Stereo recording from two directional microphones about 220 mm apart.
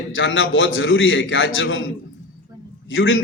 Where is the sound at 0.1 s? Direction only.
60° left (ahead or behind).